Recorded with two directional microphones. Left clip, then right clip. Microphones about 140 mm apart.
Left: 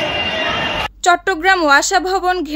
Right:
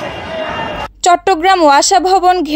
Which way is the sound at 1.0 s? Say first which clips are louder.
Right 4 dB; 40° right (ahead or behind).